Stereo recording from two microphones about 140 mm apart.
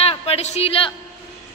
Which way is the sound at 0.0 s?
45° left (ahead or behind).